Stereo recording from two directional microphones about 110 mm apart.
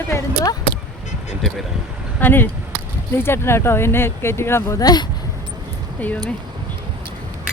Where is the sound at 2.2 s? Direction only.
20° left (ahead or behind); by 5.0 s 35° left (ahead or behind).